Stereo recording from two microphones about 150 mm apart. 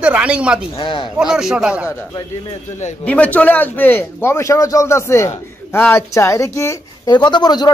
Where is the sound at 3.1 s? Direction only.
10° left (ahead or behind).